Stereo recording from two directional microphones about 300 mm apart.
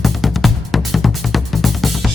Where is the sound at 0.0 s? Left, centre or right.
Centre.